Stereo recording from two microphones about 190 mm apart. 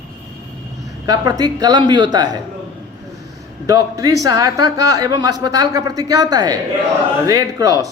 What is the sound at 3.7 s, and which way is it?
Speech, 20° right (ahead or behind).